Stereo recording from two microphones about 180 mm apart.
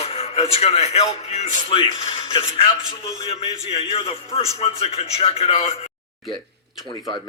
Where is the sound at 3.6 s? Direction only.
35° left (ahead or behind).